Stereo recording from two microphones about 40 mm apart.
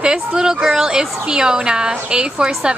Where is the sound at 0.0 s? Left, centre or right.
Right.